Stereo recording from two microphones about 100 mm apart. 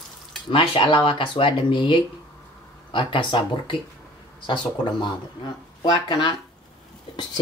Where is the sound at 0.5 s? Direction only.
60° left (ahead or behind).